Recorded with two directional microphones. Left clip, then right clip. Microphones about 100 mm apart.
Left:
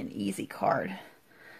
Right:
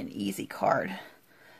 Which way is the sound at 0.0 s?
Centre (ahead or behind).